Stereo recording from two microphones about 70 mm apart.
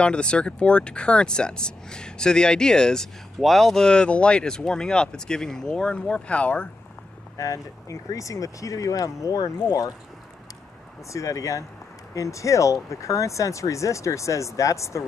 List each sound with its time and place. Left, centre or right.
0.0 s speech: centre
7.3 s speech: left
11.1 s speech: left